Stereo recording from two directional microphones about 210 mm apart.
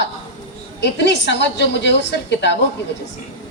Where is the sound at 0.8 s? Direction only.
55° left (ahead or behind).